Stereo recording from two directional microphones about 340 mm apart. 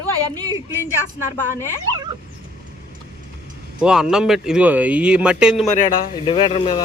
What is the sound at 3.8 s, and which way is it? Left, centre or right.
Speech, centre.